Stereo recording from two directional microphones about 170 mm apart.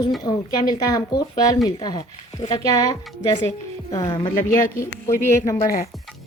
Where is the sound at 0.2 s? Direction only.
25° left (ahead or behind).